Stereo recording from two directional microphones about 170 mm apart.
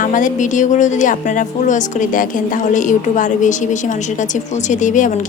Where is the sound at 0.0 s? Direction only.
50° left (ahead or behind).